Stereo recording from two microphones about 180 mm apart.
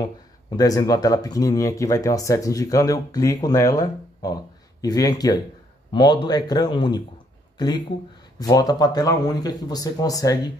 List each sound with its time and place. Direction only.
0.6 s speech: 20° left (ahead or behind)